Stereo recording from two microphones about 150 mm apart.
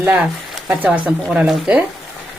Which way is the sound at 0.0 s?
10° right (ahead or behind).